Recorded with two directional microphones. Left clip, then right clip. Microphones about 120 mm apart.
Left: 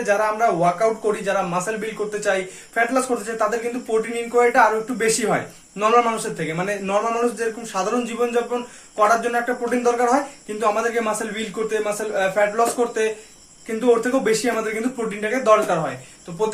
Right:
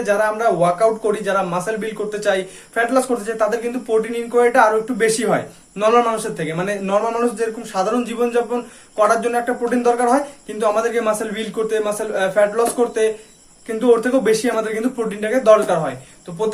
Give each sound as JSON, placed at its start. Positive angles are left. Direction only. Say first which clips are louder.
{"t": 0.0, "sound": "speech", "louder": "right 2 dB", "side_deg": -40}